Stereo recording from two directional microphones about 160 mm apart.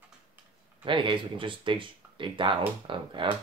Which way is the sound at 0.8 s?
30° right (ahead or behind).